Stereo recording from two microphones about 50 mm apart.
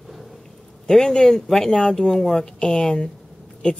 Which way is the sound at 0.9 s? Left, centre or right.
Centre.